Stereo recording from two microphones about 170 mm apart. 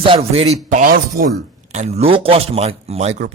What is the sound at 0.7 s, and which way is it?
Speech, 50° right (ahead or behind).